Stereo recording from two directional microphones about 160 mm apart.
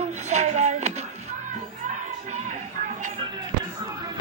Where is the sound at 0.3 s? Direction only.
45° right (ahead or behind).